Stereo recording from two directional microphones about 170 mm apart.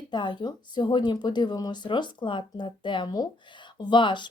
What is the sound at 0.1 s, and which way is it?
Speech, 25° left (ahead or behind).